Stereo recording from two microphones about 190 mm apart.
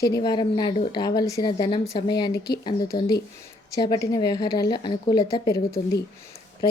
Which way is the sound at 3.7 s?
20° left (ahead or behind).